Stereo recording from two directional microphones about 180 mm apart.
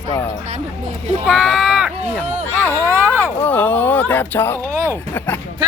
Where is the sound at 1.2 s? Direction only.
Centre (ahead or behind).